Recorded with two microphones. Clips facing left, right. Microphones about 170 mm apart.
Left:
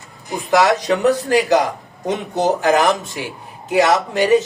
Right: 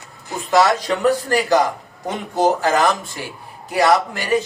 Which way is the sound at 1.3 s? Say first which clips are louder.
Left 2 dB; 20° left (ahead or behind).